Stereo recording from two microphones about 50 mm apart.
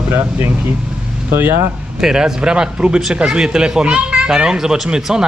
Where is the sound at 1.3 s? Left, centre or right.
Right.